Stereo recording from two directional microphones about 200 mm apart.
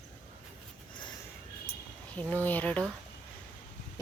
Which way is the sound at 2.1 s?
10° left (ahead or behind).